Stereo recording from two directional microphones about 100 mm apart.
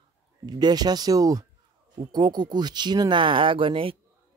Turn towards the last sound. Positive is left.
turn(degrees=-65)  # may be behind; listen again after turning